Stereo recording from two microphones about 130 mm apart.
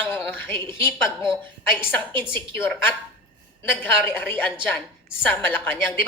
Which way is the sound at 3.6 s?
15° left (ahead or behind).